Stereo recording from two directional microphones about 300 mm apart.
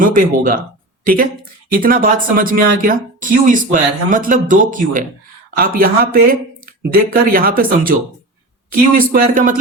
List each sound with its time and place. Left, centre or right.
0.0 s speech: right